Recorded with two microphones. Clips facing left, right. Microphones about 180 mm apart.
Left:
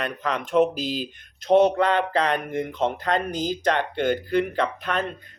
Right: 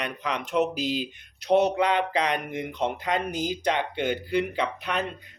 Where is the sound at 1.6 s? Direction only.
15° right (ahead or behind).